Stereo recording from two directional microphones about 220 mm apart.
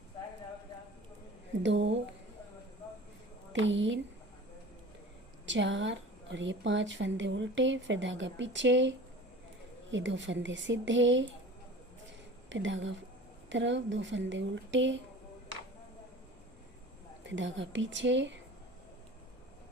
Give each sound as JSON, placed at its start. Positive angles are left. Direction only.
{"t": 1.6, "sound": "a woman's voice", "side_deg": -55}
{"t": 3.5, "sound": "a woman's voice", "side_deg": -55}
{"t": 5.5, "sound": "a woman's voice", "side_deg": -55}
{"t": 12.0, "sound": "a sound", "side_deg": -55}
{"t": 13.5, "sound": "a woman's voice", "side_deg": -55}
{"t": 17.2, "sound": "a woman's voice", "side_deg": -55}